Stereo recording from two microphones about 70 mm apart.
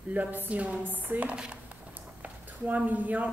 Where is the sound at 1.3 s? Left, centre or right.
Centre.